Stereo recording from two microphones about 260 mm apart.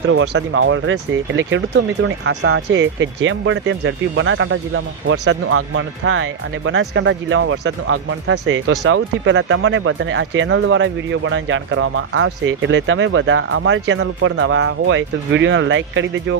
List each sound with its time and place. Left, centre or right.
0.1 s speech: right